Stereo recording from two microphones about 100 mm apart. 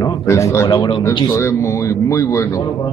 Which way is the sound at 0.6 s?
50° left (ahead or behind).